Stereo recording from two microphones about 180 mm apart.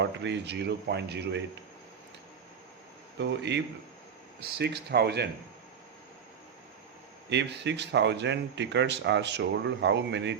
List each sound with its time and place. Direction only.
0.0 s speech: 75° right (ahead or behind)
3.2 s speech: 75° right (ahead or behind)
7.3 s speech: 75° right (ahead or behind)